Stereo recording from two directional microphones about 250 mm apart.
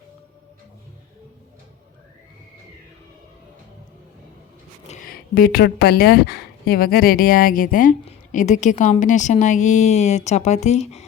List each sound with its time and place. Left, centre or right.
4.9 s speech: left